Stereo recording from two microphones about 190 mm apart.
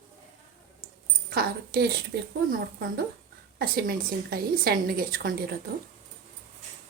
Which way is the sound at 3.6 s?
50° right (ahead or behind).